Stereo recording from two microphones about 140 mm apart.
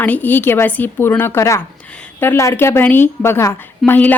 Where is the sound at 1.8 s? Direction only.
10° left (ahead or behind).